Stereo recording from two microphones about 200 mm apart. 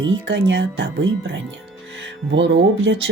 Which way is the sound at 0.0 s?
60° right (ahead or behind).